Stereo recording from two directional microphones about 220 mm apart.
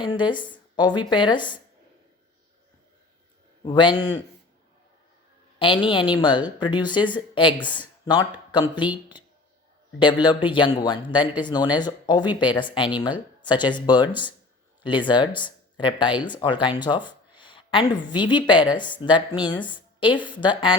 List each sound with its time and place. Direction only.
0.0 s a woman's voice: 20° left (ahead or behind)
3.6 s a woman's voice: 20° left (ahead or behind)
5.5 s a woman's voice: 25° left (ahead or behind)
10.0 s a woman's voice: 20° left (ahead or behind)